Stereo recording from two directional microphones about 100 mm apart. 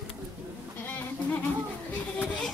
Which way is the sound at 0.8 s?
20° left (ahead or behind).